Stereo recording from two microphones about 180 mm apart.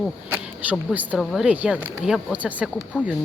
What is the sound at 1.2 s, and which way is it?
Speech, centre (ahead or behind).